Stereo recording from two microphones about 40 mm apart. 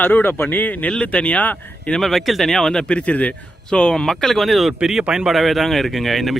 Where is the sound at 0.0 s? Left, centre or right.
Left.